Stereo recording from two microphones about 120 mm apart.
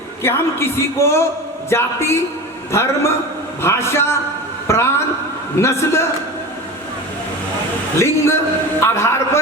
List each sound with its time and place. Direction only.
0.2 s a man's voice: 20° left (ahead or behind)
7.9 s a man's voice: 20° left (ahead or behind)